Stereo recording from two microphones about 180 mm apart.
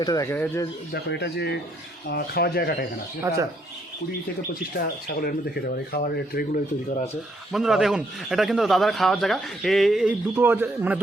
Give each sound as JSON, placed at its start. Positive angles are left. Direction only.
{"t": 0.0, "sound": "speech", "side_deg": 20}
{"t": 0.9, "sound": "speech", "side_deg": 65}
{"t": 3.3, "sound": "speech", "side_deg": -15}
{"t": 4.8, "sound": "speech", "side_deg": 60}
{"t": 7.5, "sound": "a man's voice", "side_deg": 0}